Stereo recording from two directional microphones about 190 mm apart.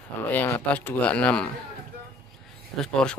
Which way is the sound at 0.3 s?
10° left (ahead or behind).